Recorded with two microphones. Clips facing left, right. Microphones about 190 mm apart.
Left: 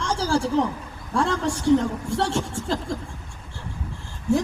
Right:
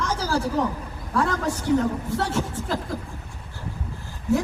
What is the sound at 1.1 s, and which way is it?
A woman's voice, 30° left (ahead or behind).